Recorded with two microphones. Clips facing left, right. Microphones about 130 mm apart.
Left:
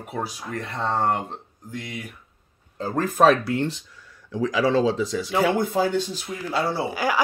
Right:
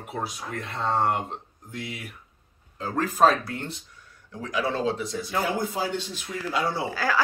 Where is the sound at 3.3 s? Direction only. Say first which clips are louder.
Left 5 dB; 90° left.